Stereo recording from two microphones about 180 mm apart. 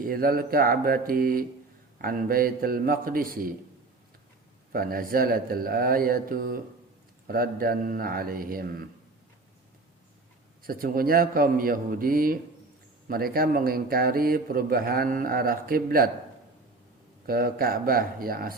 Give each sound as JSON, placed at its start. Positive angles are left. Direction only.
{"t": 0.0, "sound": "speech", "side_deg": -55}
{"t": 4.7, "sound": "speech", "side_deg": -55}
{"t": 10.6, "sound": "speech", "side_deg": -55}
{"t": 17.2, "sound": "speech", "side_deg": -55}